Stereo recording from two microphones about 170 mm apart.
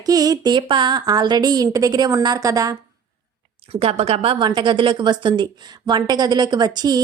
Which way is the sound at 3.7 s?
35° right (ahead or behind).